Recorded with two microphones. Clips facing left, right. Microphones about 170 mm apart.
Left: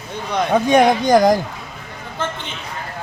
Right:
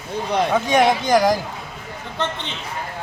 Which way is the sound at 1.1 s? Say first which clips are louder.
Left 4 dB; 20° left (ahead or behind).